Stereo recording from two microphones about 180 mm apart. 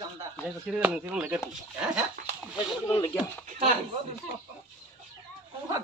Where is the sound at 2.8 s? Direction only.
30° left (ahead or behind).